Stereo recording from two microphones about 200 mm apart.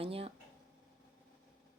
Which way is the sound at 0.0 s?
30° right (ahead or behind).